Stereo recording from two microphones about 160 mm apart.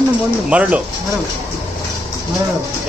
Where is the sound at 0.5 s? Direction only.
10° right (ahead or behind).